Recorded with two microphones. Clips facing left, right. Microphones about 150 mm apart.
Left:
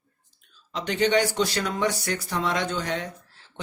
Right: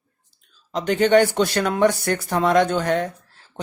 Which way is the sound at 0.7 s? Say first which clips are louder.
Right 7 dB; 50° right (ahead or behind).